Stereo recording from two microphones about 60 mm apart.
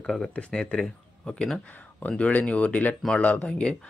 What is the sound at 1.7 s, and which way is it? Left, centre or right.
Speech, left.